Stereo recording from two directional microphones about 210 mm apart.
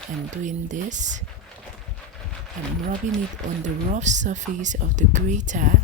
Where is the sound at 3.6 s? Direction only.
35° right (ahead or behind).